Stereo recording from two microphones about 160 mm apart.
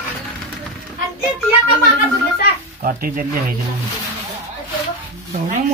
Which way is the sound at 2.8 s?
65° right (ahead or behind).